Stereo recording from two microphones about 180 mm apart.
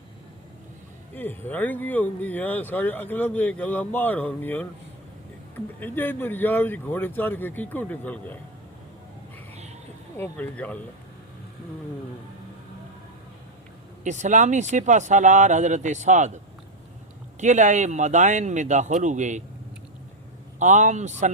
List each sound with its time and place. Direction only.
1.1 s speech: 10° left (ahead or behind)
10.2 s speech: 10° left (ahead or behind)
14.0 s speech: 40° right (ahead or behind)
17.4 s speech: 40° right (ahead or behind)
20.6 s speech: 40° right (ahead or behind)